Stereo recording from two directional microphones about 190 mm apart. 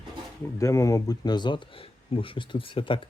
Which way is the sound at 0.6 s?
15° left (ahead or behind).